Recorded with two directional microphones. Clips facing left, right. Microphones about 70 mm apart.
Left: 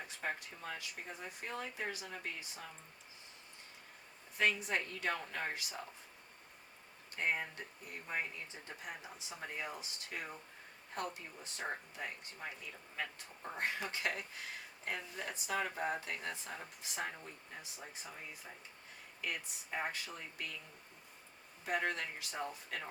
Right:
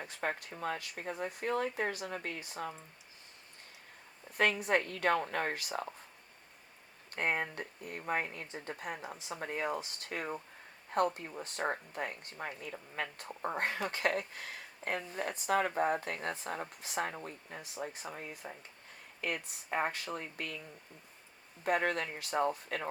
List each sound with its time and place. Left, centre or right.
0.2 s speech: right
4.4 s speech: right
7.1 s speech: right
21.6 s speech: right